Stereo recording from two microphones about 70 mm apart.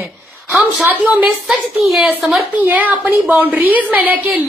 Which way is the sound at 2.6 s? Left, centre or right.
Right.